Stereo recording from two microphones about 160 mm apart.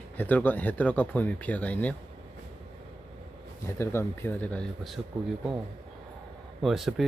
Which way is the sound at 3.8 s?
15° left (ahead or behind).